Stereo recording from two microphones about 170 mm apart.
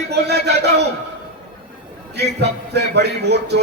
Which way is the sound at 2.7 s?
75° right (ahead or behind).